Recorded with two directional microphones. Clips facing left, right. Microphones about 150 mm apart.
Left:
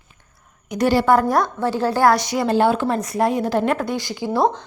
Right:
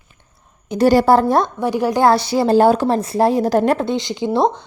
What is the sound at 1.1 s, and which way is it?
Speech, 25° right (ahead or behind).